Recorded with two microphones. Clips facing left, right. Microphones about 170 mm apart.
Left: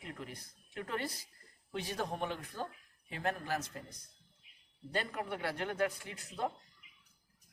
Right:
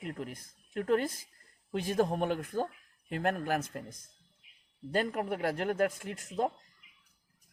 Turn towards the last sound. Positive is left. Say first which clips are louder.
# right 6 dB
turn(degrees=-45)  # may be behind; listen again after turning